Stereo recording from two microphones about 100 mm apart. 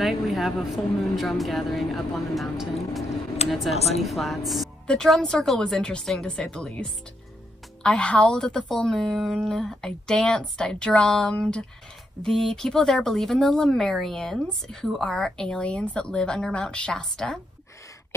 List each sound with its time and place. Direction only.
0.0 s speech: centre (ahead or behind)
3.7 s a woman's voice: 90° left
4.0 s a woman's voice: centre (ahead or behind)